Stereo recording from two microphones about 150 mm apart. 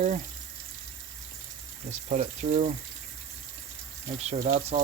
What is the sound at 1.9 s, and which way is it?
Speech, 50° right (ahead or behind).